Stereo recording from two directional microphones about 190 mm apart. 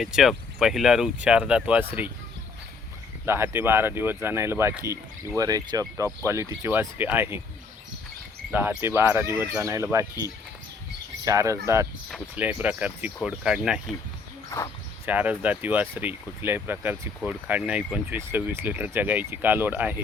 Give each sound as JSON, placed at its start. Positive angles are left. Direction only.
{"t": 0.0, "sound": "speech", "side_deg": 0}
{"t": 3.2, "sound": "speech", "side_deg": -15}
{"t": 8.5, "sound": "speech", "side_deg": -10}
{"t": 11.3, "sound": "speech", "side_deg": -15}
{"t": 15.0, "sound": "speech", "side_deg": -10}